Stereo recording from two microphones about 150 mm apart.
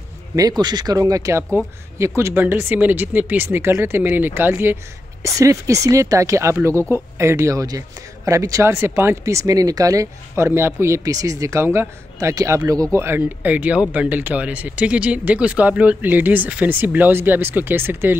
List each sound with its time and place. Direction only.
0.4 s speech: 25° right (ahead or behind)